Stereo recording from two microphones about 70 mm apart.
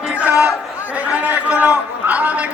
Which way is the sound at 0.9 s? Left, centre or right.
Right.